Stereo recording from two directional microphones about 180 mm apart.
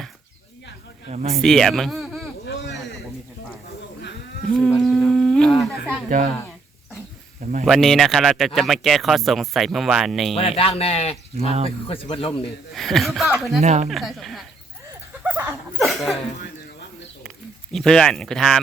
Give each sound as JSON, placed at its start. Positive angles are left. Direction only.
{"t": 1.1, "sound": "speech", "side_deg": -35}
{"t": 1.4, "sound": "speech", "side_deg": 0}
{"t": 4.5, "sound": "humming", "side_deg": 0}
{"t": 7.6, "sound": "speech", "side_deg": 0}
{"t": 10.3, "sound": "speech", "side_deg": 30}
{"t": 12.7, "sound": "speech", "side_deg": 0}
{"t": 13.6, "sound": "speech", "side_deg": -40}
{"t": 13.9, "sound": "speech", "side_deg": 0}
{"t": 15.2, "sound": "dog", "side_deg": -10}
{"t": 15.8, "sound": "speech", "side_deg": 0}
{"t": 17.2, "sound": "speech", "side_deg": 0}